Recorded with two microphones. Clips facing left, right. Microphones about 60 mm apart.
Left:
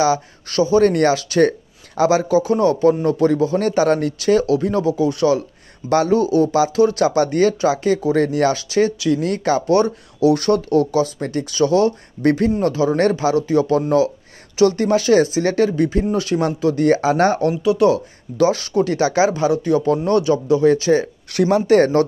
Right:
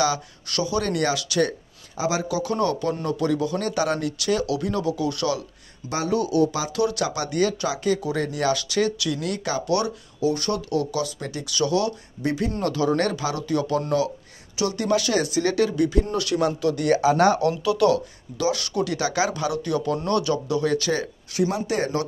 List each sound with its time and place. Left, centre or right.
0.0 s speech: left
2.4 s speech: left
5.9 s speech: left
6.1 s speech: left
8.5 s speech: left
9.2 s speech: left
10.2 s speech: left
12.2 s speech: left
12.6 s speech: left
18.4 s speech: left
21.3 s speech: left